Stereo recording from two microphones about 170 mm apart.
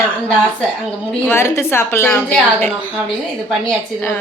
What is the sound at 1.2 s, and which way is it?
A woman's voice, 15° left (ahead or behind).